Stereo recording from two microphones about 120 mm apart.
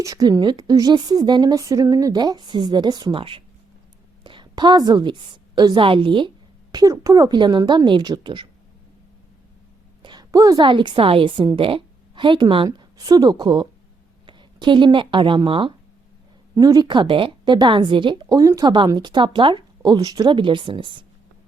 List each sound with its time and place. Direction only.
0.0 s a woman's voice: 30° right (ahead or behind)
3.2 s a woman's voice: 50° right (ahead or behind)
10.0 s a sound: 35° right (ahead or behind)
10.6 s a woman's voice: 45° right (ahead or behind)
16.6 s a woman's voice: 35° right (ahead or behind)